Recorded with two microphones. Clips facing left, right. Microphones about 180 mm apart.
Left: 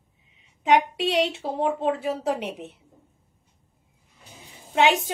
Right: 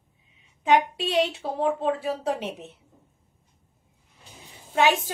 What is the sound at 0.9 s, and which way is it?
Speech, 70° left (ahead or behind).